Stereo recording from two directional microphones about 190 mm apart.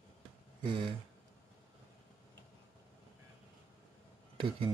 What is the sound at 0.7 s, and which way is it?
Speech, 25° right (ahead or behind).